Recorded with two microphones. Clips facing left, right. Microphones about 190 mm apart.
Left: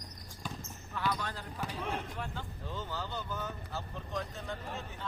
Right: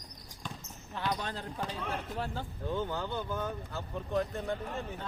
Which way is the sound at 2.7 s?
55° right (ahead or behind).